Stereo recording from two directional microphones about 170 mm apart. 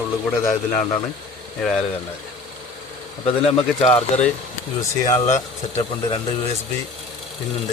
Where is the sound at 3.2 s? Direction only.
35° left (ahead or behind).